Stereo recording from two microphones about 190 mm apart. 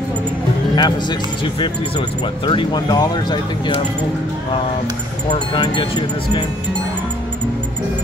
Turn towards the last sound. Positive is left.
turn(degrees=20)  # may be behind; listen again after turning